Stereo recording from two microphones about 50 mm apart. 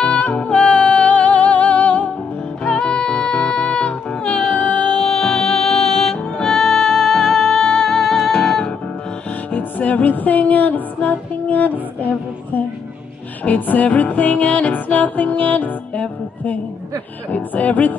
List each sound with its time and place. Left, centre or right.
0.0 s music: left
4.9 s music: centre
9.5 s music: left
13.4 s music: left